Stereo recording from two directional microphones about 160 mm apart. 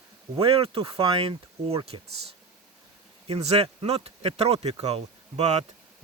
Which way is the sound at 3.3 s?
40° right (ahead or behind).